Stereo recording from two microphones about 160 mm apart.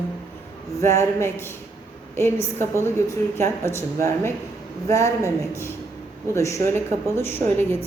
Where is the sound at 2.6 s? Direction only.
15° left (ahead or behind).